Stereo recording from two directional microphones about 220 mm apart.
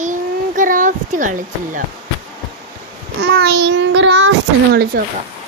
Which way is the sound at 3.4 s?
50° right (ahead or behind).